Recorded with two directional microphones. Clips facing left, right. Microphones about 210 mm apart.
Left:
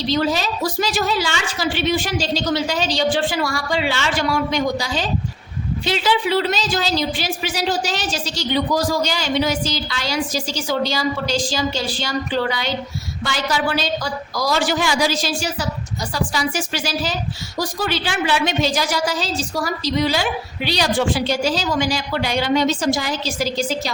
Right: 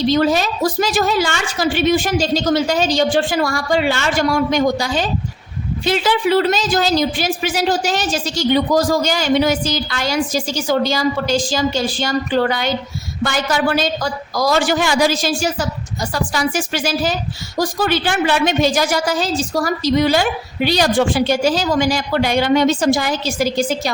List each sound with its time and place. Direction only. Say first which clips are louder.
0.1 s a woman's voice: right 4 dB; 50° right (ahead or behind)